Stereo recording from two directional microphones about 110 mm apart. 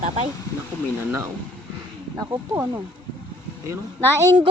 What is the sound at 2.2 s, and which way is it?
Speech, 30° right (ahead or behind).